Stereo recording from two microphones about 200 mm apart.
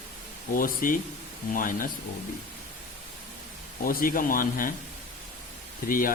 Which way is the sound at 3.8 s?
45° left (ahead or behind).